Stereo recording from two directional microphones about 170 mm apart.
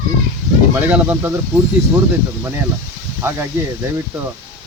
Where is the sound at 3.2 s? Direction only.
15° right (ahead or behind).